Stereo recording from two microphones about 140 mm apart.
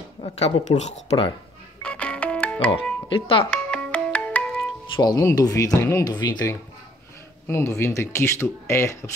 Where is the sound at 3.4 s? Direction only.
5° left (ahead or behind).